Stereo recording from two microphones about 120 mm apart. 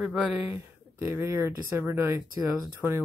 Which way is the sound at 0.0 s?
10° right (ahead or behind).